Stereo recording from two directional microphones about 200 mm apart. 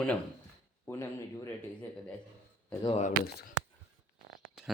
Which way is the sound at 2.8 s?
25° left (ahead or behind).